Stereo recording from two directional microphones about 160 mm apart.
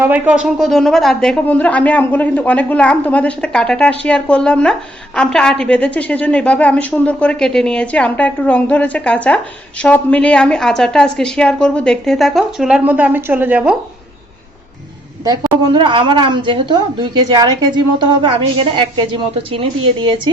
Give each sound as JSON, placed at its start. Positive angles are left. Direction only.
{"t": 0.0, "sound": "a woman's voice", "side_deg": -10}
{"t": 15.2, "sound": "a woman's voice", "side_deg": -25}